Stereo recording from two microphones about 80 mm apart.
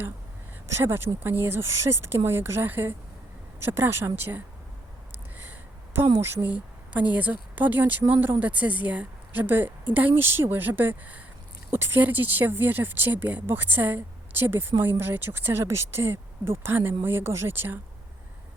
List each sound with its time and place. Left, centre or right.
0.8 s a woman's voice: right
5.4 s a sound: right
6.5 s a woman's voice: centre